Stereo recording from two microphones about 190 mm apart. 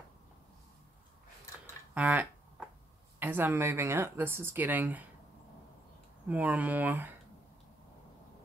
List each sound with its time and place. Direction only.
2.0 s a sound: 10° right (ahead or behind)
3.2 s speech: 10° right (ahead or behind)
6.2 s speech: 10° right (ahead or behind)